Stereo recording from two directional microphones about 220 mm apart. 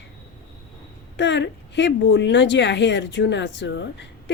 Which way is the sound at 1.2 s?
55° left (ahead or behind).